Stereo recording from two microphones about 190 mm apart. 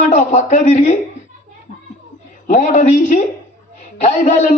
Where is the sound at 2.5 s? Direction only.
40° left (ahead or behind).